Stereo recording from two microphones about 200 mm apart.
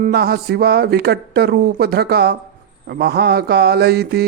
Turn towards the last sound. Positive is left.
turn(degrees=-55)  # may be behind; listen again after turning